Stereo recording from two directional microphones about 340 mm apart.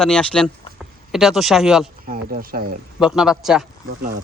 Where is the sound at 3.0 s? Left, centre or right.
Centre.